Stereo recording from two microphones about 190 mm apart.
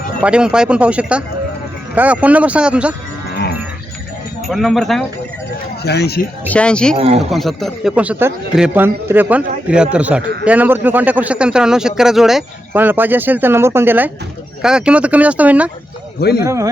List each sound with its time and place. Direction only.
0.2 s speech: 5° right (ahead or behind)
4.4 s speech: centre (ahead or behind)
5.8 s speech: 60° left (ahead or behind)
6.5 s speech: 5° left (ahead or behind)
6.9 s speech: 30° right (ahead or behind)
7.2 s speech: centre (ahead or behind)
16.2 s speech: 55° left (ahead or behind)